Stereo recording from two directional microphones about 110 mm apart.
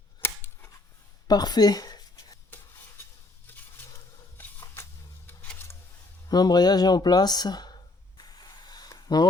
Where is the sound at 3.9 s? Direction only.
25° left (ahead or behind).